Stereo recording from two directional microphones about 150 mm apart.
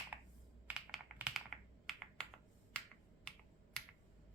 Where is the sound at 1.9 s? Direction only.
Centre (ahead or behind).